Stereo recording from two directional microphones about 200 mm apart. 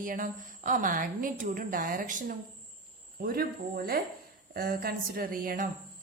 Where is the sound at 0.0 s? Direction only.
40° right (ahead or behind).